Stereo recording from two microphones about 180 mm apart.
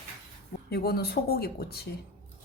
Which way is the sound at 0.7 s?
60° left (ahead or behind).